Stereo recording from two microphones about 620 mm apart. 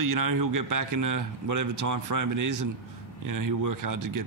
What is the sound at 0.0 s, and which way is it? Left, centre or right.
A man's voice, right.